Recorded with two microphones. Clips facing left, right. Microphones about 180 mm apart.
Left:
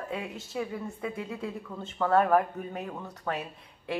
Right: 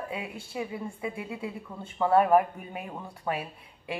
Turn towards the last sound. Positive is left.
turn(degrees=-10)  # may be behind; listen again after turning